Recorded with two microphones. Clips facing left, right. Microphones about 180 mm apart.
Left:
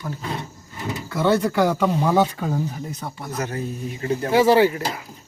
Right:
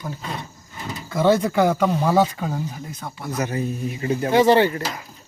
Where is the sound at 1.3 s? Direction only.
15° right (ahead or behind).